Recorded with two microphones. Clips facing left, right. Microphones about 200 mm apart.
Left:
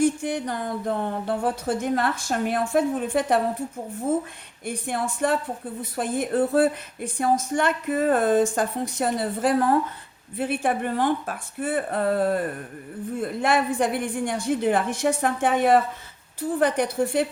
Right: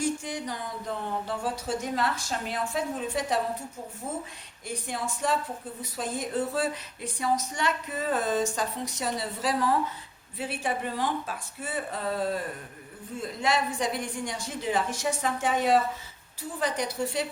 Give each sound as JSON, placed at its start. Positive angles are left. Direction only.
{"t": 0.0, "sound": "speech", "side_deg": 55}
{"t": 4.6, "sound": "speech", "side_deg": 55}